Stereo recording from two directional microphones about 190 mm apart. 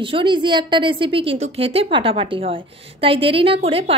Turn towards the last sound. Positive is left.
turn(degrees=-30)  # may be behind; listen again after turning